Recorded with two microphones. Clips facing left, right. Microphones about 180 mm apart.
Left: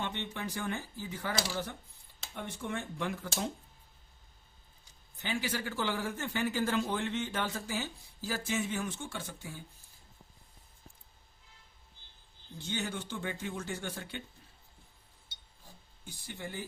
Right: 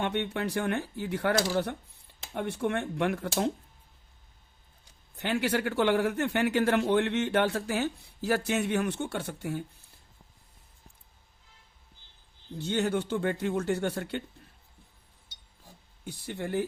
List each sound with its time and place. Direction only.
0.0 s a man's voice: 65° right (ahead or behind)
5.1 s a man's voice: 65° right (ahead or behind)
12.5 s speech: 60° right (ahead or behind)
16.0 s speech: 65° right (ahead or behind)